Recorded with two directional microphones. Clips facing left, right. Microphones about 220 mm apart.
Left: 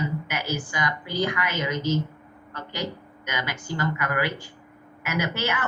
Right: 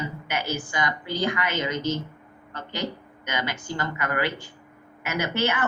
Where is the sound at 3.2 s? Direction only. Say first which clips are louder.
Right 2 dB; 25° right (ahead or behind).